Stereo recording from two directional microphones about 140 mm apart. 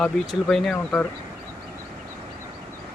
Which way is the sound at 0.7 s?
15° left (ahead or behind).